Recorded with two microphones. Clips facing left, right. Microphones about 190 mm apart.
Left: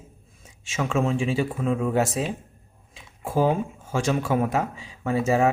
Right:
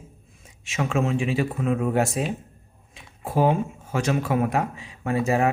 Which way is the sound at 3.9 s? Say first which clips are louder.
Left 1 dB; 30° left (ahead or behind).